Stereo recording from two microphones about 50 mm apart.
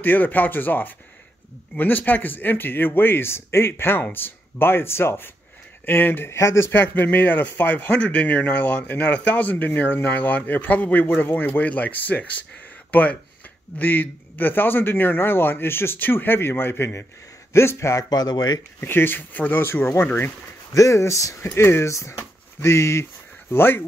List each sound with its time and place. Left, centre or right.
0.0 s a man's voice: left
6.3 s speech: left
6.7 s a man's voice: left
17.5 s speech: left
18.8 s a man's voice: left
19.5 s a man's voice: left
20.8 s speech: left
21.5 s speech: left
21.8 s speech: left
23.5 s a man's voice: left